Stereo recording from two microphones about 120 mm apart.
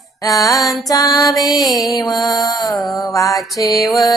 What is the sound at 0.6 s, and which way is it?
Music, centre (ahead or behind).